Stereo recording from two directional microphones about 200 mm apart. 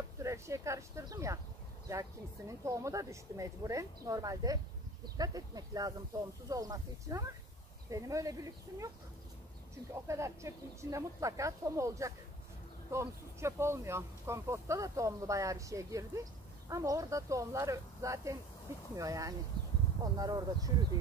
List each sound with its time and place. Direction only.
0.2 s speech: 15° right (ahead or behind)
10.0 s speech: 15° right (ahead or behind)